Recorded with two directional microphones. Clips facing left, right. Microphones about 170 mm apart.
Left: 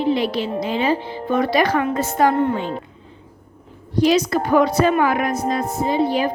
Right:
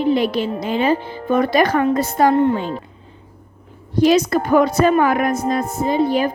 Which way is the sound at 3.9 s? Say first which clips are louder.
Right 2 dB; 50° right (ahead or behind).